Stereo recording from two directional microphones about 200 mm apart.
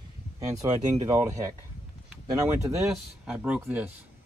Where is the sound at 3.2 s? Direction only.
5° right (ahead or behind).